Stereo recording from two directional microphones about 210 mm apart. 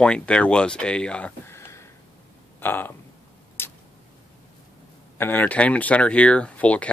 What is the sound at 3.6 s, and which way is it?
Tick-tock, 10° left (ahead or behind).